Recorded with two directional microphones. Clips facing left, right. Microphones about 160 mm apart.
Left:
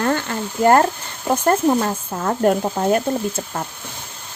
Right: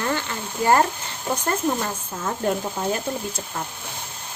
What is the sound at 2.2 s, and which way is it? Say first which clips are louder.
Stir: left 7 dB; 60° left (ahead or behind).